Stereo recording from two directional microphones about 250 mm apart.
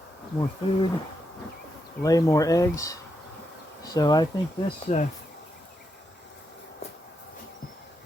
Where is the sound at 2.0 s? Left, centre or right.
Centre.